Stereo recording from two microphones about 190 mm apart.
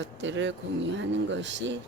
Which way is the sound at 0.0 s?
75° right (ahead or behind).